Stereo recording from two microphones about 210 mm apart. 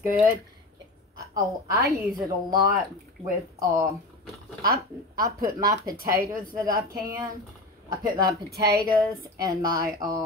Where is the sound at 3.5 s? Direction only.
15° right (ahead or behind).